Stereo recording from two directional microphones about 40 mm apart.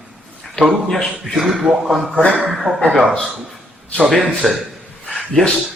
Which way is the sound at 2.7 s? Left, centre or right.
Right.